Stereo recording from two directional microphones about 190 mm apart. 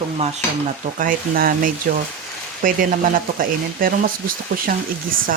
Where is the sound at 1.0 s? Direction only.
50° right (ahead or behind).